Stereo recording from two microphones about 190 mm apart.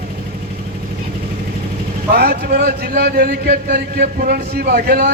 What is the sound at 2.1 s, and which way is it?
A man's voice, 55° right (ahead or behind).